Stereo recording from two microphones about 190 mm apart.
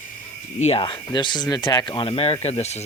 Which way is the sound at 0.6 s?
30° left (ahead or behind).